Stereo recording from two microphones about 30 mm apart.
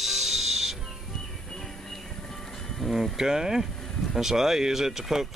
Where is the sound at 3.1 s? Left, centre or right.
Centre.